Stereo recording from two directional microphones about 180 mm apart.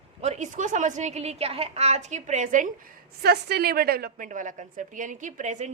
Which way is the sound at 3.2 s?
60° right (ahead or behind).